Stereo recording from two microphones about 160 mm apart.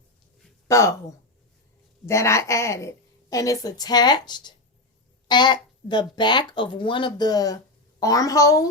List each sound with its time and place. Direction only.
0.7 s speech: 20° left (ahead or behind)
2.0 s a woman's voice: 20° left (ahead or behind)